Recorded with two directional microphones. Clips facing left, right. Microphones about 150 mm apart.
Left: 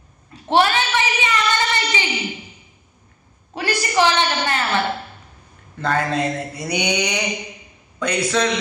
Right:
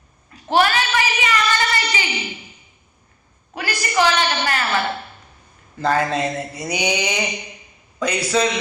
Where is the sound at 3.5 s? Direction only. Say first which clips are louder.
Left 1 dB; 30° left (ahead or behind).